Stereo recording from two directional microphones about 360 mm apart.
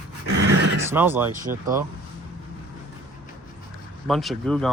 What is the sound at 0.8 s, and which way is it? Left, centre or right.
Speech, centre.